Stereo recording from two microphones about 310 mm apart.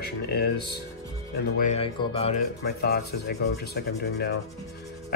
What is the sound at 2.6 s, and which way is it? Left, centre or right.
Speech, left.